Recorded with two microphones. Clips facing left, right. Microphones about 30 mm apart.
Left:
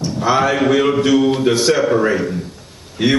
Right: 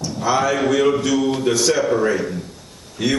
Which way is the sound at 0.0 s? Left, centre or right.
Left.